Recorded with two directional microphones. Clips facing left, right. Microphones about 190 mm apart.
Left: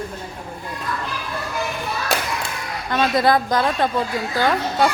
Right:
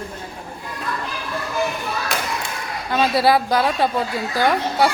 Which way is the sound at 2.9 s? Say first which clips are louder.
Right 1 dB; 10° right (ahead or behind).